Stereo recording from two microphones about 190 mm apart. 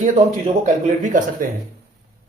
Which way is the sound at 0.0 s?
40° right (ahead or behind).